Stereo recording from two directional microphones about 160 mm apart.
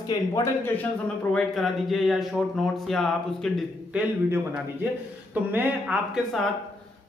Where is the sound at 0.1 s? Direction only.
20° left (ahead or behind).